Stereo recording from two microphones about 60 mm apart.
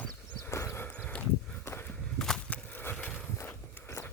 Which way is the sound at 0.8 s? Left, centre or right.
Left.